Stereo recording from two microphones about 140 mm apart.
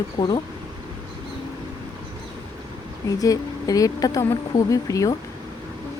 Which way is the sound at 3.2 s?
25° left (ahead or behind).